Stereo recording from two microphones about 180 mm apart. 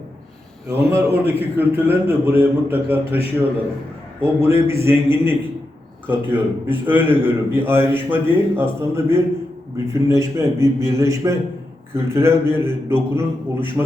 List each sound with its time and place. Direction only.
0.7 s a man's voice: 15° right (ahead or behind)
4.2 s a man's voice: 15° right (ahead or behind)